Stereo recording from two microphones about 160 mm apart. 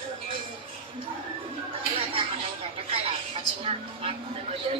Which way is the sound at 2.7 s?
35° right (ahead or behind).